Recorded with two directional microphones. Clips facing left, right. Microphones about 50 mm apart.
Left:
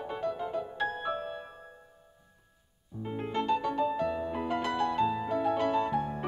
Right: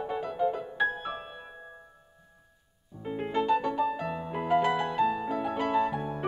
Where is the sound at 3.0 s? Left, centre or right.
Centre.